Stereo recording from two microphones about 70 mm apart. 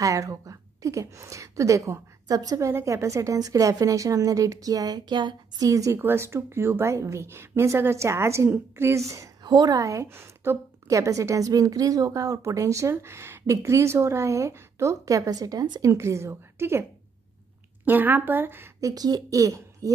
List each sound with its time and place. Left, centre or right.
0.0 s a woman's voice: right
2.6 s a woman's voice: right
5.7 s a woman's voice: right
5.9 s a woman's voice: right
9.4 s a woman's voice: right
10.0 s a woman's voice: right
15.8 s a woman's voice: right
17.8 s a woman's voice: right
18.8 s a woman's voice: right